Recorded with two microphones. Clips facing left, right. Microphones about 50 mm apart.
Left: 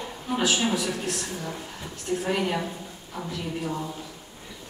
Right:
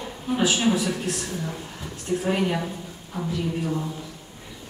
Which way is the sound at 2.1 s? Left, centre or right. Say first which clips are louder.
Right 2 dB; right.